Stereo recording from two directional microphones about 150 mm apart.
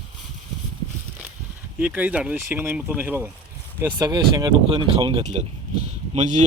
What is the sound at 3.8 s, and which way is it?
Speech, 25° right (ahead or behind).